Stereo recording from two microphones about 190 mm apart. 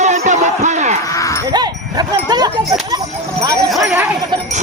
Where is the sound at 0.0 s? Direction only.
40° right (ahead or behind).